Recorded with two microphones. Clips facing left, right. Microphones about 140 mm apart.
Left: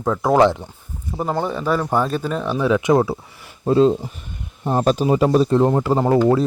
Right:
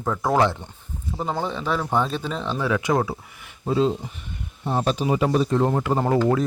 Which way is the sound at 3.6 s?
45° left (ahead or behind).